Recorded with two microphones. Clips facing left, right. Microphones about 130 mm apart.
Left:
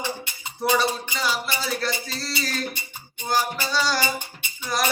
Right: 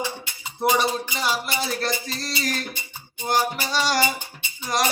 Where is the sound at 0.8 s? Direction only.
20° right (ahead or behind).